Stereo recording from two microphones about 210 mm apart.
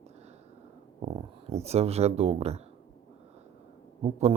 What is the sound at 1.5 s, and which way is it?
Speech, 30° right (ahead or behind).